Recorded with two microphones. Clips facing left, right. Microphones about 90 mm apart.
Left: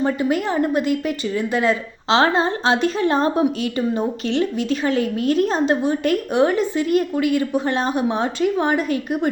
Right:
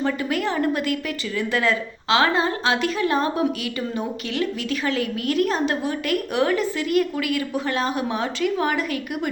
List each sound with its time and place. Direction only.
0.1 s speech: 25° left (ahead or behind)